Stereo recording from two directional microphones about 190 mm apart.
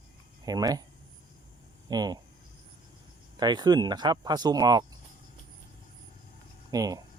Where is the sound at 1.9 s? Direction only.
20° right (ahead or behind).